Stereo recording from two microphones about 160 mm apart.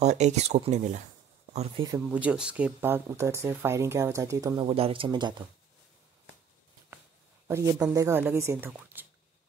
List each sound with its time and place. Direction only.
0.0 s speech: 45° right (ahead or behind)
2.0 s speech: 10° right (ahead or behind)
4.6 s speech: 35° right (ahead or behind)
7.4 s a man's voice: 15° right (ahead or behind)